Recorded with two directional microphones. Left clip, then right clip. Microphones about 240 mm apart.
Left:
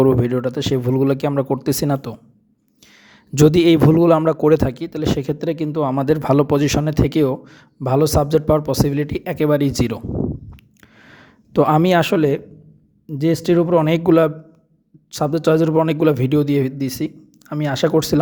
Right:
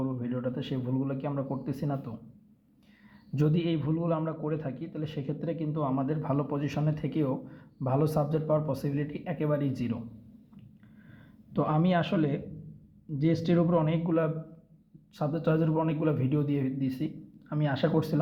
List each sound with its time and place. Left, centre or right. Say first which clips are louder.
0.0 s speech: left 18 dB; left
3.3 s speech: left 17 dB; left
11.1 s speech: left 15 dB; left